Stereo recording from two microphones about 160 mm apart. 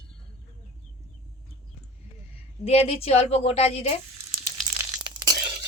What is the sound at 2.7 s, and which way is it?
A woman's voice, 40° left (ahead or behind).